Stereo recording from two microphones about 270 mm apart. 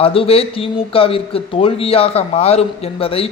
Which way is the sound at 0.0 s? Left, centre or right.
Left.